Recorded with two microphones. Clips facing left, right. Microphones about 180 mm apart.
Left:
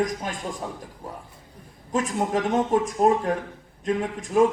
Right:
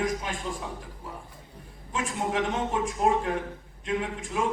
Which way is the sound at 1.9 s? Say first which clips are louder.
Left 5 dB; 40° left (ahead or behind).